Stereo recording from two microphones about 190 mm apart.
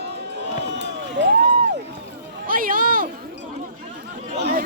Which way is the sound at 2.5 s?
45° right (ahead or behind).